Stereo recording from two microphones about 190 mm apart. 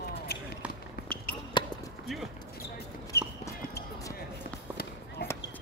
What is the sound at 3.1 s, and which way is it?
Basketball bounce, 55° left (ahead or behind).